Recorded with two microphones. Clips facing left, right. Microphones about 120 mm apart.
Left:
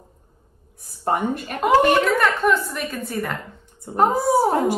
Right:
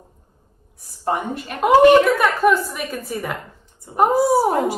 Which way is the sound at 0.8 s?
45° left (ahead or behind).